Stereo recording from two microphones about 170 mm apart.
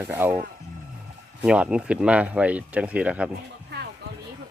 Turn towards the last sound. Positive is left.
turn(degrees=-80)